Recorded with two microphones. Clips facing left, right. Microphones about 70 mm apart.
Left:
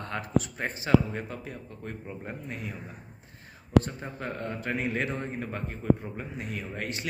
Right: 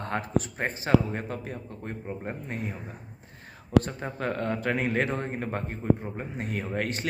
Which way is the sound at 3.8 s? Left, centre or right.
Right.